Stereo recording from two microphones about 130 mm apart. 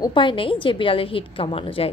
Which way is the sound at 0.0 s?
40° left (ahead or behind).